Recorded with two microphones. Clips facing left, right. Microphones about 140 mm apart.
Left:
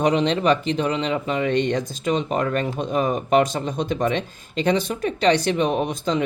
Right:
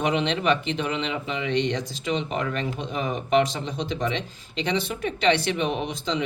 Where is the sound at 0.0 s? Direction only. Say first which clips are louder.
Left 5 dB; 40° left (ahead or behind).